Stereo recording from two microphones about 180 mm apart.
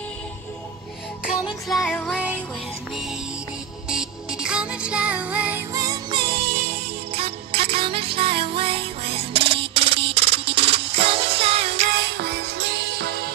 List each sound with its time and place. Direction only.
1.4 s music: centre (ahead or behind); by 11.9 s 35° right (ahead or behind)
12.2 s music: 70° right (ahead or behind)